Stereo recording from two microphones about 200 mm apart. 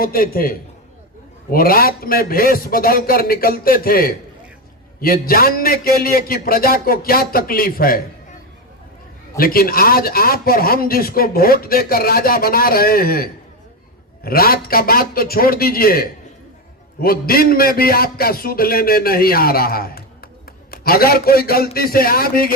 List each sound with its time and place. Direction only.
0.0 s a man's voice: 45° left (ahead or behind)
9.4 s a man's voice: 50° left (ahead or behind)